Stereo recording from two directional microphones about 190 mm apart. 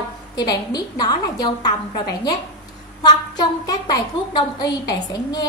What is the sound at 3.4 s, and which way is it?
A woman's voice, 20° left (ahead or behind).